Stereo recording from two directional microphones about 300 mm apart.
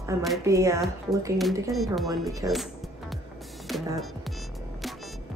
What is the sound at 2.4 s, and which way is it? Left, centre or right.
Speech, centre.